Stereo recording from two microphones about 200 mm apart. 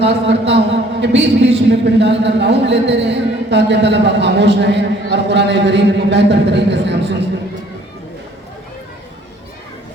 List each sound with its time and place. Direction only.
0.0 s speech: 60° right (ahead or behind)